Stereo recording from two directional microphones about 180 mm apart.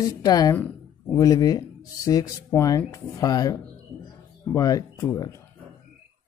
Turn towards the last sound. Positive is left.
turn(degrees=20)  # may be behind; listen again after turning